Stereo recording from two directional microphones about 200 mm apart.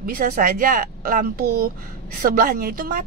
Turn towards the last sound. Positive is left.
turn(degrees=-45)  # may be behind; listen again after turning